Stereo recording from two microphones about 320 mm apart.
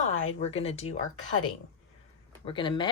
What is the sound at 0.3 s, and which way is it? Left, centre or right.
Speech, centre.